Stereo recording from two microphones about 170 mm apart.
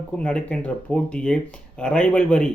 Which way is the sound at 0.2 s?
5° left (ahead or behind).